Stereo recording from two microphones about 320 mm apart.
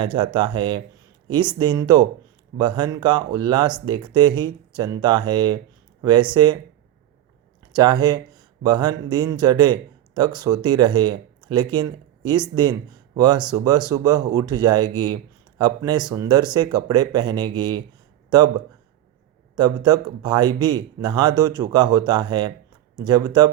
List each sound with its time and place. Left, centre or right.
0.0 s speech: centre
7.7 s speech: centre
19.5 s speech: centre